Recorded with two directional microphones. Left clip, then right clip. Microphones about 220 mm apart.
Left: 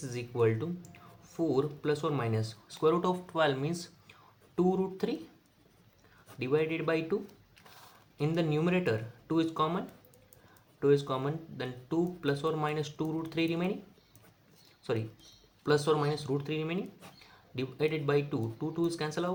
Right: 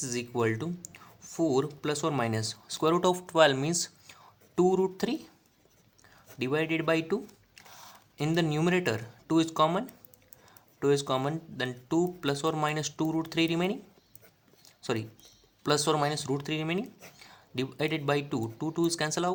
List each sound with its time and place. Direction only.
0.0 s speech: 50° right (ahead or behind)
6.4 s speech: 50° right (ahead or behind)
8.2 s speech: 50° right (ahead or behind)
14.8 s a sound: 50° right (ahead or behind)
15.6 s speech: 50° right (ahead or behind)